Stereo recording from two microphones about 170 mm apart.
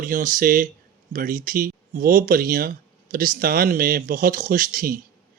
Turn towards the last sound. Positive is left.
turn(degrees=-55)  # may be behind; listen again after turning